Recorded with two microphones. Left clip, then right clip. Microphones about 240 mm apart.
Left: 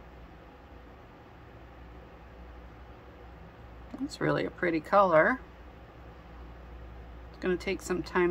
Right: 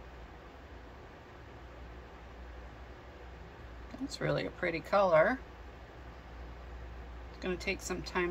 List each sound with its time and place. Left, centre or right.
4.1 s speech: left
7.4 s speech: left